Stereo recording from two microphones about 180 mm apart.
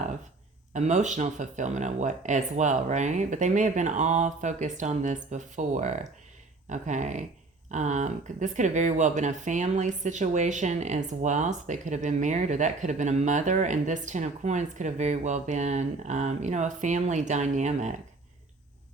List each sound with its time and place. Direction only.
0.7 s speech: 40° right (ahead or behind)